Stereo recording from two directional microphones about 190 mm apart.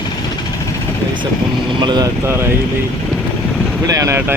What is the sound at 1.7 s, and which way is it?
Speech, 25° right (ahead or behind).